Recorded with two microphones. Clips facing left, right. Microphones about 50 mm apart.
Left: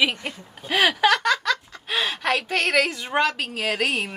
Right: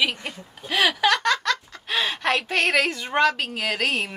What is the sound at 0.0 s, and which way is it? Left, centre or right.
Speech, centre.